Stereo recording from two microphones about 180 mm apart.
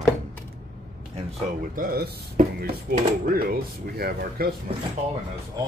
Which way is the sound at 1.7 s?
60° right (ahead or behind).